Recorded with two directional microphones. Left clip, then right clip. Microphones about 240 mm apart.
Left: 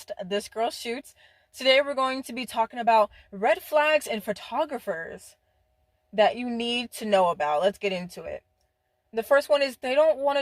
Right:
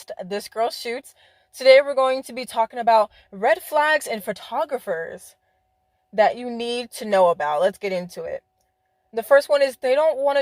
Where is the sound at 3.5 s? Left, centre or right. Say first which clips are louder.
Right 3 dB; right.